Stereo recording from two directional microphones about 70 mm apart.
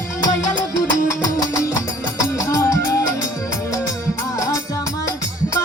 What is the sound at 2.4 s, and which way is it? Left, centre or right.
Music, left.